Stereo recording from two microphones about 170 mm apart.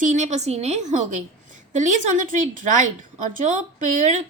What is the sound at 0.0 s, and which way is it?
A woman's voice, 45° right (ahead or behind).